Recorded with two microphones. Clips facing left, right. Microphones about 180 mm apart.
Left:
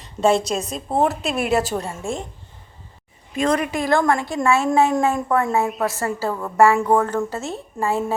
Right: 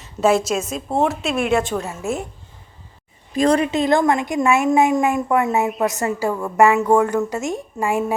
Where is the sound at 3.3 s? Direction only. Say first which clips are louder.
Right 4 dB; 35° right (ahead or behind); by 8.0 s 15° right (ahead or behind).